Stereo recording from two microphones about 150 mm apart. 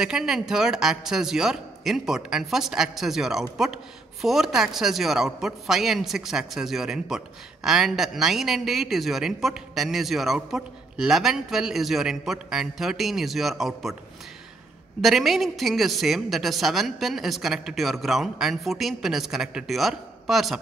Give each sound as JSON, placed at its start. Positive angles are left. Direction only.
{"t": 0.0, "sound": "a man's voice", "side_deg": -5}
{"t": 15.0, "sound": "a man's voice", "side_deg": 0}